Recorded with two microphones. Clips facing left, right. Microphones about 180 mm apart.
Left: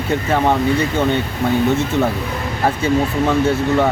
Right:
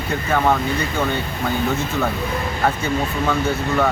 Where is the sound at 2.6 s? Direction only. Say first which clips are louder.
Left 5 dB; 30° left (ahead or behind).